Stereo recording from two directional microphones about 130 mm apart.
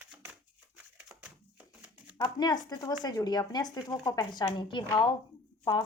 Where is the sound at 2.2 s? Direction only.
30° left (ahead or behind).